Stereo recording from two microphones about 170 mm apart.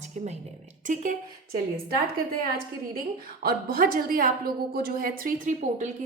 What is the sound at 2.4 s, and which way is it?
A woman's voice, 60° right (ahead or behind).